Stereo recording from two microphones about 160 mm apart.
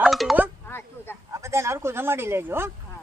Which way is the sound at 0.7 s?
15° left (ahead or behind).